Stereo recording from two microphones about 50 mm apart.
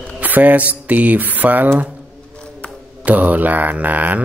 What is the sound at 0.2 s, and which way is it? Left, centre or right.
Speech, right.